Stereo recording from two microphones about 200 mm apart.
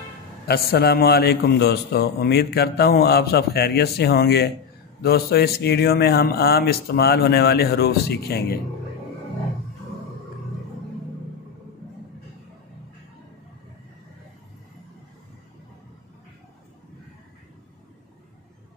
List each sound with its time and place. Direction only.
0.5 s a man's voice: 50° left (ahead or behind)